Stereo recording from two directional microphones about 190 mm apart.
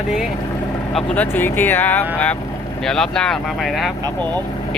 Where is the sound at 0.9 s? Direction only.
5° left (ahead or behind).